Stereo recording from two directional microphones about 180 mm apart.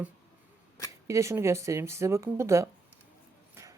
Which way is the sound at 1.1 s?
15° right (ahead or behind).